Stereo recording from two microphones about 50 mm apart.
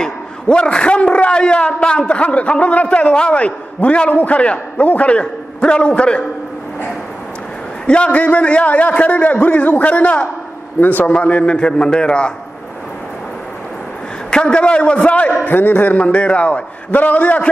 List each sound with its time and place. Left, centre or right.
0.0 s a man's voice: centre
7.8 s a man's voice: left
11.2 s a man's voice: left
14.3 s a man's voice: centre
15.4 s a man's voice: left